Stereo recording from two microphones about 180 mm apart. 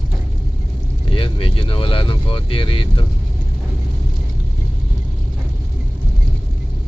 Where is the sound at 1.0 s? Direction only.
30° left (ahead or behind).